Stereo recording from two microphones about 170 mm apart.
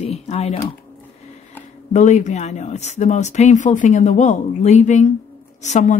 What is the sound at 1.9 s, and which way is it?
Speech, 45° left (ahead or behind).